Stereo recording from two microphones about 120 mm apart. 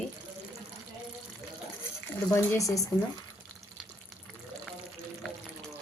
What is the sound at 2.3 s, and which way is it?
Speech, 25° left (ahead or behind).